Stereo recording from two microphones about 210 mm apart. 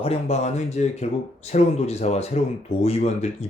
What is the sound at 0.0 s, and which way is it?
Speech, 30° left (ahead or behind).